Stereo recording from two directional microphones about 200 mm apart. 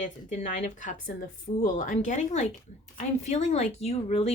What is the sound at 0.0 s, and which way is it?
Speech, 35° left (ahead or behind).